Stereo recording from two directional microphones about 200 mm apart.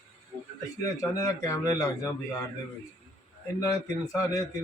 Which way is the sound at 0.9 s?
15° left (ahead or behind).